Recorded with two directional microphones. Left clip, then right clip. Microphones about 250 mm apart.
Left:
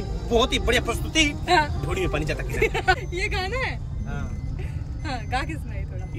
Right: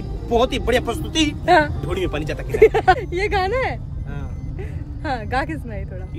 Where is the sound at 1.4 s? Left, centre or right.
Right.